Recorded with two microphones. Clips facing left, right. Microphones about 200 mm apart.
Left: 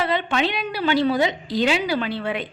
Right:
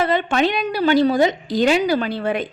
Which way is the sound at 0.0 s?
45° right (ahead or behind).